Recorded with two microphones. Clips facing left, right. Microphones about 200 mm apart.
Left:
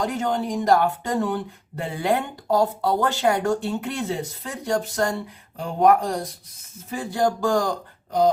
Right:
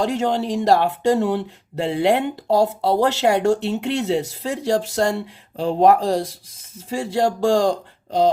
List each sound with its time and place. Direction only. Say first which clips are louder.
0.0 s speech: right 4 dB; 30° right (ahead or behind)